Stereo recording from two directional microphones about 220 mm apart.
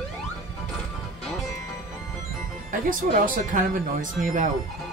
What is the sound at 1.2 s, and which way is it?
Music, centre (ahead or behind).